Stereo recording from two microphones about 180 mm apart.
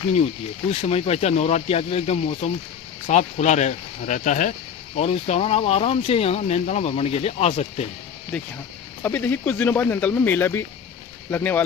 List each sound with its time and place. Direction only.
0.1 s speech: 35° left (ahead or behind)
9.0 s speech: 10° left (ahead or behind)